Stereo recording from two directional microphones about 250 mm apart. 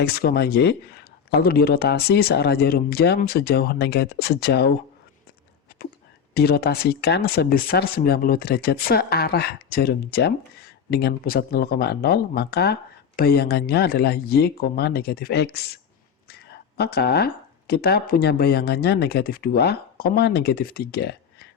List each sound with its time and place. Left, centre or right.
0.0 s speech: left
6.3 s speech: left